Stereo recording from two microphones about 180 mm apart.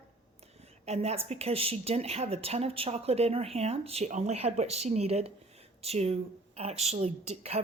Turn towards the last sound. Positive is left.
turn(degrees=-35)  # may be behind; listen again after turning